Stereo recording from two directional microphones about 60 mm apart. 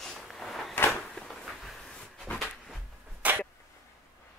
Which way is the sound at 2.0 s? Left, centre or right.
Centre.